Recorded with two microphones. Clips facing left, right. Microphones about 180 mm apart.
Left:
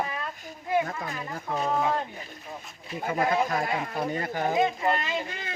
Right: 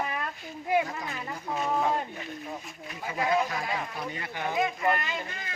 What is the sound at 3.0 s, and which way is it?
Speech, 50° left (ahead or behind).